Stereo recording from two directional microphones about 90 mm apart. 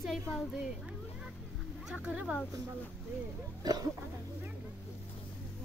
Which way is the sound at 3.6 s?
50° right (ahead or behind).